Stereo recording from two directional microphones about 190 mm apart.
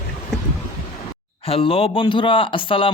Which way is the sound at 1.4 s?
30° left (ahead or behind).